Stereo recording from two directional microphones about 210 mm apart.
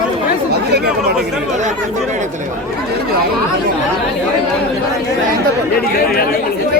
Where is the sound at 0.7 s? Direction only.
50° right (ahead or behind).